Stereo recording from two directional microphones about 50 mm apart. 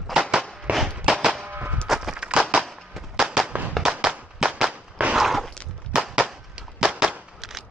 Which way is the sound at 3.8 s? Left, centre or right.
Centre.